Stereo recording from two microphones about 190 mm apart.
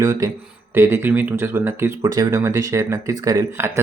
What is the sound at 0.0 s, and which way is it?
Speech, 15° right (ahead or behind).